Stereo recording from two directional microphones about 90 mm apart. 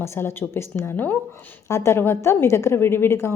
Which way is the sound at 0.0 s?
30° left (ahead or behind).